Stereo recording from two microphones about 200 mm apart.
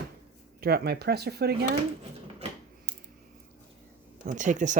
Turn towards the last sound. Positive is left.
turn(degrees=-40)  # may be behind; listen again after turning